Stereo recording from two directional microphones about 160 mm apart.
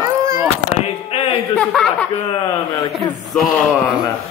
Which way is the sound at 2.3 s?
25° left (ahead or behind).